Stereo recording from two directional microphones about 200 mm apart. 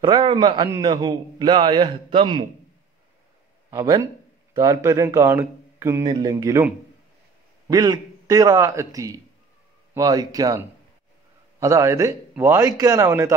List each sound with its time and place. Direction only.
0.0 s a man's voice: 25° right (ahead or behind)
3.7 s a man's voice: 15° right (ahead or behind)